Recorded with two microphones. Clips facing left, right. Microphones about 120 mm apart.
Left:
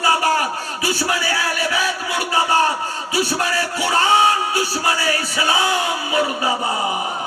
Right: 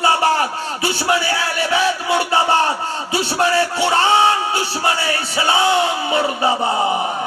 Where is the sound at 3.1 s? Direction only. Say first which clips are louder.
Right 4 dB; 25° right (ahead or behind).